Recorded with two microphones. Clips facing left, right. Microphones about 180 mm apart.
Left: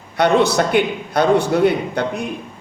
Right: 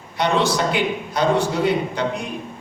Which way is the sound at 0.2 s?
55° left (ahead or behind).